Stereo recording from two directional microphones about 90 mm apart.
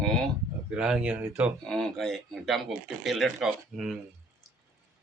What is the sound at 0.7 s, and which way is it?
Speech, 10° right (ahead or behind).